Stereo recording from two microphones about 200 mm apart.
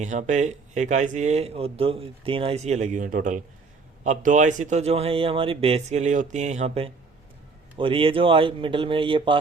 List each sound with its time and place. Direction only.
0.0 s speech: 35° right (ahead or behind)